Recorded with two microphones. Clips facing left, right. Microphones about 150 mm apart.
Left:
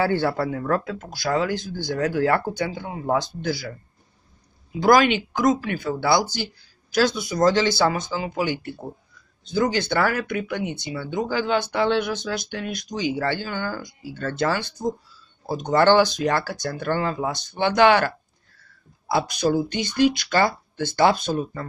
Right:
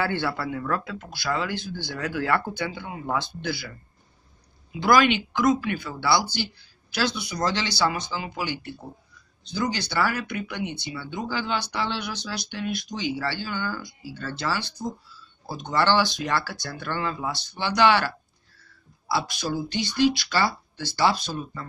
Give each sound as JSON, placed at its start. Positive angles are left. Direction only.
{"t": 0.0, "sound": "speech", "side_deg": 40}
{"t": 4.7, "sound": "speech", "side_deg": 45}